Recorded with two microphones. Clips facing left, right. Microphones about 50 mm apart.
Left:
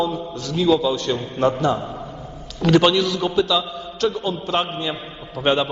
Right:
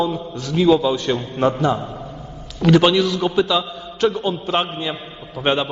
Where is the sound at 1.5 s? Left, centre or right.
Centre.